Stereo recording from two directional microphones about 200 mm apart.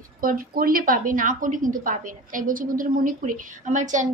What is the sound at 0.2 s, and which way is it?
A woman's voice, 45° right (ahead or behind).